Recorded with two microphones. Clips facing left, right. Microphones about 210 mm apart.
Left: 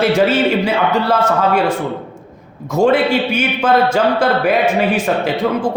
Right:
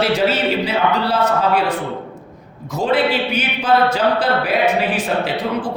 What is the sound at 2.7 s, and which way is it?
Speech, 45° left (ahead or behind).